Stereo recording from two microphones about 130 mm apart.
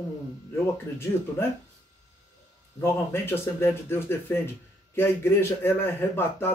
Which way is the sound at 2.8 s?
20° left (ahead or behind).